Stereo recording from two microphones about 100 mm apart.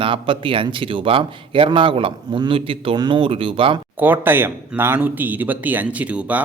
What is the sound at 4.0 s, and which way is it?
Speech, 20° right (ahead or behind).